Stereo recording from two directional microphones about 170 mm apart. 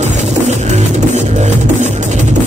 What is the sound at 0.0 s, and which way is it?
Music, 40° right (ahead or behind).